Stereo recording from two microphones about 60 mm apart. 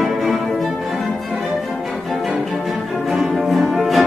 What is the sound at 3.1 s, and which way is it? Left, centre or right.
Music, centre.